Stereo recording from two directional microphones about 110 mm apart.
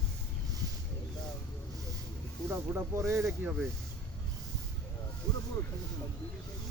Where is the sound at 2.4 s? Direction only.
25° right (ahead or behind).